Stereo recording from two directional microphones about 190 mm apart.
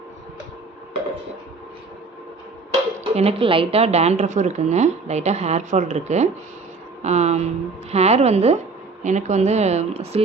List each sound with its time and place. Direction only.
3.0 s a woman's voice: 30° right (ahead or behind)